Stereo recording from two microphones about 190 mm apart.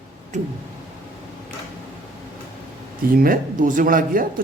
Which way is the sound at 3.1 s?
50° right (ahead or behind).